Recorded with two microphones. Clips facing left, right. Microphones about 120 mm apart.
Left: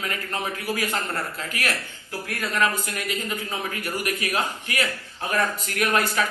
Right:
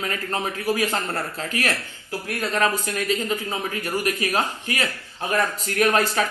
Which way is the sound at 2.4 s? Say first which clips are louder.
Right 2 dB; 30° right (ahead or behind).